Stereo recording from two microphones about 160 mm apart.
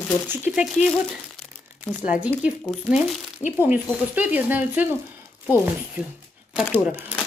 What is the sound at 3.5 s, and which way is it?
Speech, 10° right (ahead or behind).